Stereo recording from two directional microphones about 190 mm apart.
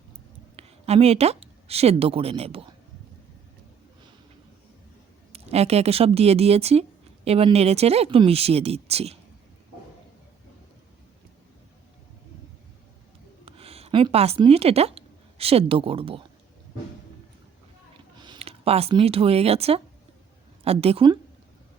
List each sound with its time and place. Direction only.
0.5 s speech: 30° right (ahead or behind)
5.3 s speech: 35° right (ahead or behind)
13.4 s speech: 30° right (ahead or behind)
18.2 s a woman's voice: 25° right (ahead or behind)